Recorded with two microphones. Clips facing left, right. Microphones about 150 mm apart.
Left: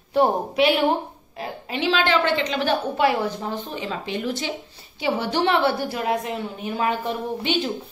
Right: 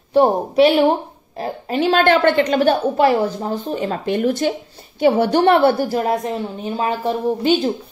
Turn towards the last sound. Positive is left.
turn(degrees=-35)  # may be behind; listen again after turning